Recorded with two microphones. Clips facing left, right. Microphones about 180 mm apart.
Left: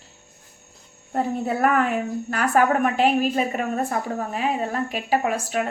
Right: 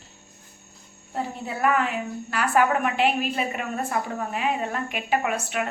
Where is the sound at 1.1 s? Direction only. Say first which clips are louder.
Left 7 dB; 50° left (ahead or behind).